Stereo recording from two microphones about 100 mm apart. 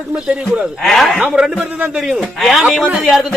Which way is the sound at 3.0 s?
Centre (ahead or behind).